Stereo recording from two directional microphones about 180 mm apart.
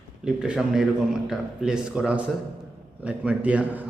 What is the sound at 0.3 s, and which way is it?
A man's voice, 5° right (ahead or behind).